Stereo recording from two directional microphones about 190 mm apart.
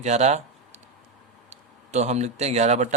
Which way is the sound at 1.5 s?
35° right (ahead or behind).